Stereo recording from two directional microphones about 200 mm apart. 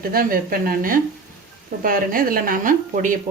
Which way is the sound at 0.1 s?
45° right (ahead or behind).